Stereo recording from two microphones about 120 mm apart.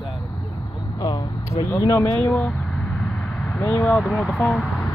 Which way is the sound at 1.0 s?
30° left (ahead or behind).